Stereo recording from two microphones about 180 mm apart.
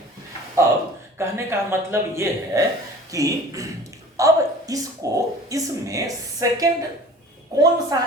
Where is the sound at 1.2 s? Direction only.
15° right (ahead or behind).